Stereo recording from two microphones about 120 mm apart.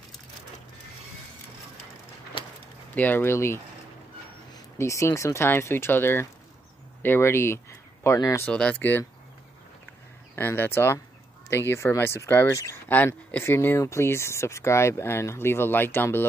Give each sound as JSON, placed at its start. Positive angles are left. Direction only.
{"t": 2.9, "sound": "speech", "side_deg": 15}
{"t": 4.7, "sound": "speech", "side_deg": 25}
{"t": 8.5, "sound": "speech", "side_deg": 10}
{"t": 10.3, "sound": "speech", "side_deg": 20}